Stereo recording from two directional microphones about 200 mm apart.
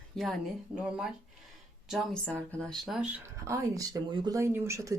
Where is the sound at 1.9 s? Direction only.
Centre (ahead or behind).